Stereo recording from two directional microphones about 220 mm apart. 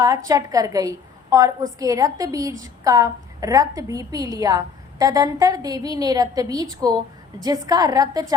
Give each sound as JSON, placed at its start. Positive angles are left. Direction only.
{"t": 0.0, "sound": "a woman's voice", "side_deg": -15}